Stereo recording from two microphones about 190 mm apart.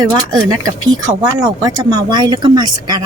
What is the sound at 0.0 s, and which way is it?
Speech, 20° right (ahead or behind).